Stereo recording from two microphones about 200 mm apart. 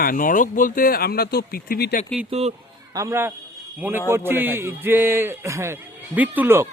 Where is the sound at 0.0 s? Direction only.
45° left (ahead or behind).